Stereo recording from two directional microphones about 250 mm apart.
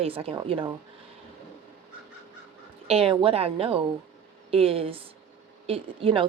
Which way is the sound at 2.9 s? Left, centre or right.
Right.